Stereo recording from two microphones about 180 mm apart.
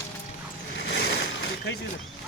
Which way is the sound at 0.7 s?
70° left (ahead or behind).